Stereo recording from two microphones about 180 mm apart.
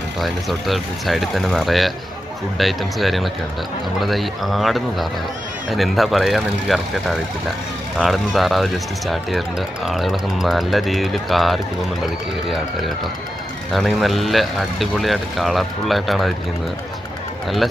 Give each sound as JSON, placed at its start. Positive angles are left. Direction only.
{"t": 0.7, "sound": "speech", "side_deg": 0}
{"t": 13.7, "sound": "speech", "side_deg": 0}